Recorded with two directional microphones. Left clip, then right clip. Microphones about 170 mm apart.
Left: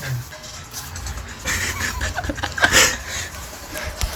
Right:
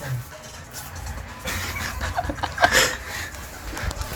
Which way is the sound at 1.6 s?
5° left (ahead or behind).